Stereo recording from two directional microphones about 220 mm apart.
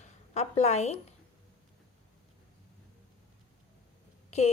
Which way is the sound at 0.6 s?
30° left (ahead or behind).